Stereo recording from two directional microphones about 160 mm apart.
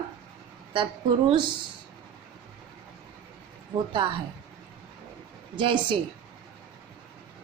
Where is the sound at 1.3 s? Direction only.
30° right (ahead or behind).